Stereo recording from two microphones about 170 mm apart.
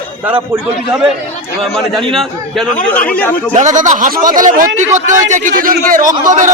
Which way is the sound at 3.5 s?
45° right (ahead or behind).